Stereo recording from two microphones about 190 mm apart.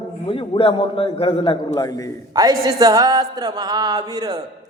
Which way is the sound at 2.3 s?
20° right (ahead or behind).